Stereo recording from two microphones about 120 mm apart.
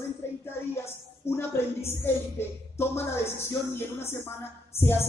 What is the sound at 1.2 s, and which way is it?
A man's voice, 20° left (ahead or behind).